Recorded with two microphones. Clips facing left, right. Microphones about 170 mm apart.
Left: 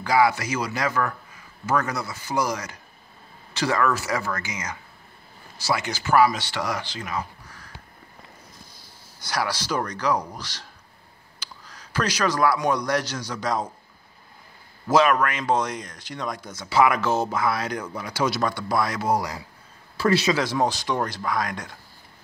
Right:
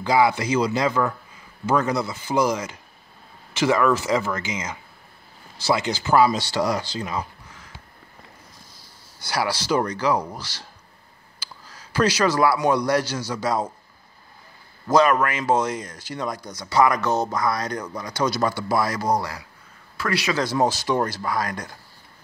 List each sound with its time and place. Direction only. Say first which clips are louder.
0.0 s speech: right 1 dB; 25° right (ahead or behind)
6.3 s speech: right 5 dB; 35° right (ahead or behind)
7.2 s a sound: right 1 dB; 20° right (ahead or behind)
9.2 s speech: right 2 dB; 10° right (ahead or behind)
12.2 s speech: even; 5° right (ahead or behind)
14.9 s speech: right 1 dB; 5° left (ahead or behind)
20.0 s speech: left 4 dB; 25° left (ahead or behind)
20.3 s speech: right 2 dB; centre (ahead or behind)